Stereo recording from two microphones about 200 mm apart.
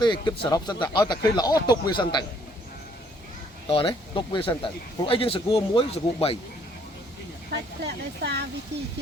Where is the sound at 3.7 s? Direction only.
25° left (ahead or behind).